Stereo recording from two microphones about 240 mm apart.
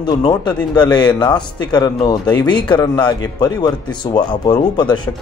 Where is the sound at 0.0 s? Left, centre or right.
Centre.